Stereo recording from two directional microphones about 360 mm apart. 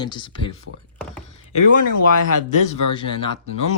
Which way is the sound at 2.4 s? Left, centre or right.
Centre.